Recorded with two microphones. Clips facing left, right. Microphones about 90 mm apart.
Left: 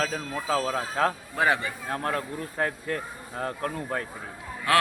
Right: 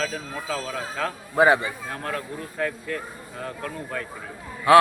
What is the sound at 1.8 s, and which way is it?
Speech, 35° left (ahead or behind).